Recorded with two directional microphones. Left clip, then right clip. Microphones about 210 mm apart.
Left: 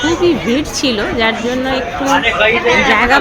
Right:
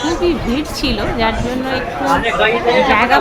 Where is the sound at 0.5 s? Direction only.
15° left (ahead or behind).